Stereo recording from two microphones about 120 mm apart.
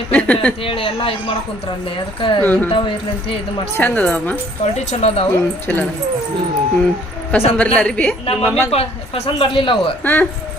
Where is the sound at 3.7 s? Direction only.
15° left (ahead or behind).